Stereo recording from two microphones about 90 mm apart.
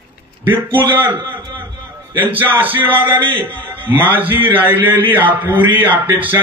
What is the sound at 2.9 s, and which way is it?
Speech, 70° right (ahead or behind).